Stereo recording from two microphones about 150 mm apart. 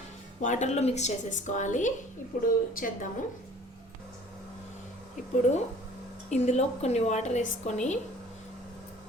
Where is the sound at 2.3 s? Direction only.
80° left.